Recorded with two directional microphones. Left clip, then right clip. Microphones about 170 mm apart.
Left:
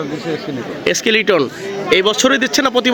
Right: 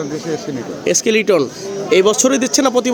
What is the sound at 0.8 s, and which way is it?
Speech, 15° right (ahead or behind).